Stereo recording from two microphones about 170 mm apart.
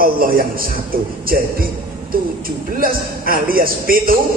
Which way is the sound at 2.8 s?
60° right (ahead or behind).